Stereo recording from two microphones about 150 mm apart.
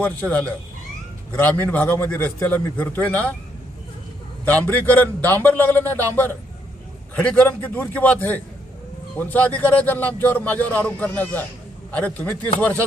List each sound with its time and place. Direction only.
0.0 s a man's voice: 10° left (ahead or behind)
4.4 s a man's voice: 10° left (ahead or behind)